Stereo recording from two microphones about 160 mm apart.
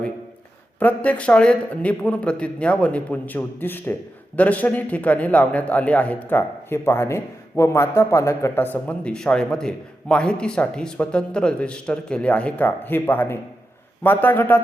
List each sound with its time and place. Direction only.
0.8 s a man's voice: 10° left (ahead or behind)